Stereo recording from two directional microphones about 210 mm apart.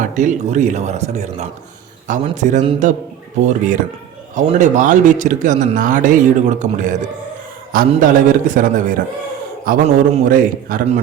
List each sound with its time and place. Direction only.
0.0 s speech: 35° right (ahead or behind)
4.4 s speech: 35° right (ahead or behind)